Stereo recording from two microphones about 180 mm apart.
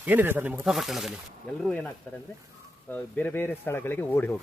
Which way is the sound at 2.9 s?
10° left (ahead or behind).